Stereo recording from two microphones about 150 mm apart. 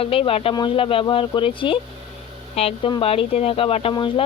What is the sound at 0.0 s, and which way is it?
Speech, 40° left (ahead or behind).